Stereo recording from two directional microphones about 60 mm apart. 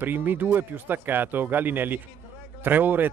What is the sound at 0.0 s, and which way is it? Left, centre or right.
Speech, right.